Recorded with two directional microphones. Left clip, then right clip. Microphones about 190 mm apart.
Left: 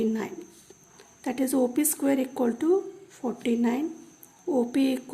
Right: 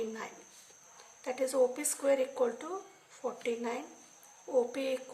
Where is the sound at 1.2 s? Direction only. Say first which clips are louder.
Left 3 dB; 50° left (ahead or behind).